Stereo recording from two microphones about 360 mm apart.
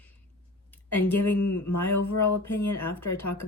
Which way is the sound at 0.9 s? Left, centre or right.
Centre.